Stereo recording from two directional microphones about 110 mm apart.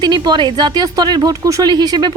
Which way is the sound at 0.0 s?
40° right (ahead or behind).